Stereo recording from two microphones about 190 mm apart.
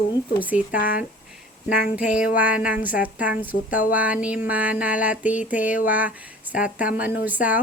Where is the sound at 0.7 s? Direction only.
50° left (ahead or behind).